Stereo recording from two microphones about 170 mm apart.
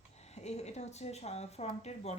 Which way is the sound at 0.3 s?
40° left (ahead or behind).